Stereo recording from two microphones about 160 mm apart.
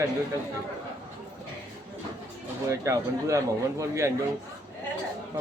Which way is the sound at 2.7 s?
20° right (ahead or behind).